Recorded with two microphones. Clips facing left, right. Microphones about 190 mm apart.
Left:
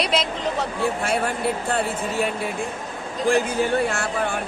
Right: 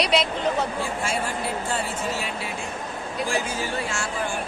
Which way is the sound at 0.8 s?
60° left (ahead or behind).